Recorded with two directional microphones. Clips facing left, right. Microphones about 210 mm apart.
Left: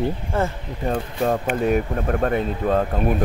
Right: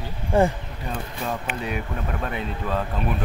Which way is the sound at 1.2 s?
50° left (ahead or behind).